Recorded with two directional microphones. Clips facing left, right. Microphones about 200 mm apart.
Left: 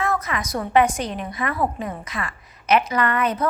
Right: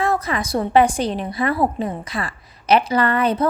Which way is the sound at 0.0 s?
30° right (ahead or behind).